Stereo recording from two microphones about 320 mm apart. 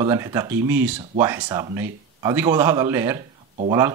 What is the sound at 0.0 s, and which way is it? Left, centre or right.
Speech, centre.